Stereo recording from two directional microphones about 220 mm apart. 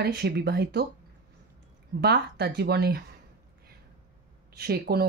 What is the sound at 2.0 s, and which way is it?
Speech, 50° right (ahead or behind).